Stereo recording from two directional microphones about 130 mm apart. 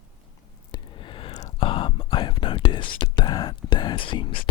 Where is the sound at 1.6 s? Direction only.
40° left (ahead or behind).